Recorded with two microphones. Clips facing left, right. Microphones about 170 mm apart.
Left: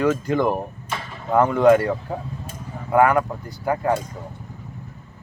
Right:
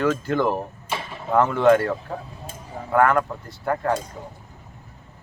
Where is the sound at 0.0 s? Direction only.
Centre (ahead or behind).